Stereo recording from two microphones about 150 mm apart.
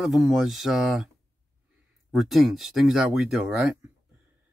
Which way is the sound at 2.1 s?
Centre (ahead or behind).